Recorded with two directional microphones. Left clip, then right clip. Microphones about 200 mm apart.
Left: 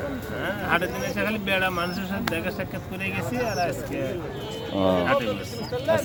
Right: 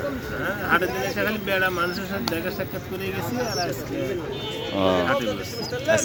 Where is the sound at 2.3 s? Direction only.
40° left (ahead or behind).